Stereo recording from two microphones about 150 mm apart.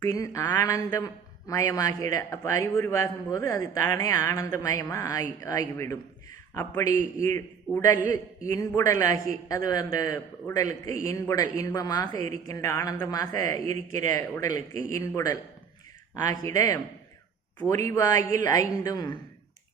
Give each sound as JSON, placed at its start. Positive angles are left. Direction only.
{"t": 0.0, "sound": "a man's voice", "side_deg": 20}
{"t": 8.5, "sound": "a man's voice", "side_deg": 20}
{"t": 16.4, "sound": "a man's voice", "side_deg": 25}
{"t": 18.9, "sound": "a man's voice", "side_deg": 25}